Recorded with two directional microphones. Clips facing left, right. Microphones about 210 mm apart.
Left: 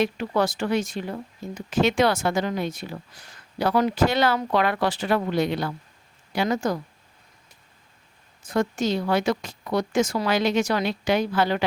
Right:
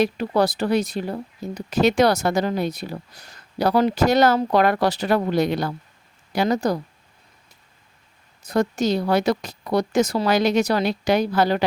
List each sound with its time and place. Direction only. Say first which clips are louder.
0.0 s speech: right 3 dB; 35° right (ahead or behind)
8.4 s speech: right 3 dB; 40° right (ahead or behind)